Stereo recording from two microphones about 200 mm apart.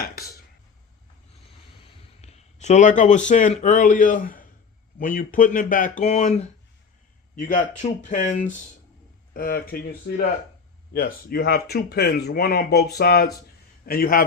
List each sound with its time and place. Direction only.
1.9 s a sound: 35° left (ahead or behind)
3.2 s speech: 40° left (ahead or behind)
10.9 s speech: 50° left (ahead or behind)